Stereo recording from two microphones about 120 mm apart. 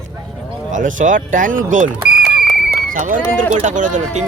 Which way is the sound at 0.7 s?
90° right.